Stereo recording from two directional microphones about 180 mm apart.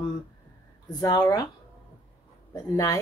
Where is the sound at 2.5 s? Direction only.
20° left (ahead or behind).